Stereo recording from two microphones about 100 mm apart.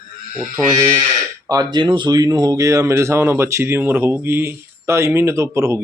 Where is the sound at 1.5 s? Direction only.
35° right (ahead or behind).